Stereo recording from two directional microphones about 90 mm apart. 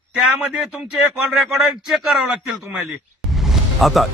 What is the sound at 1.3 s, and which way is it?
Speech, 5° right (ahead or behind).